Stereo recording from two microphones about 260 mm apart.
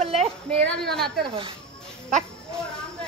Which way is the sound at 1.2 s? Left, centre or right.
Centre.